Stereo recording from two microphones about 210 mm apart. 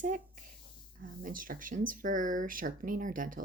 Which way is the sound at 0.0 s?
40° right (ahead or behind).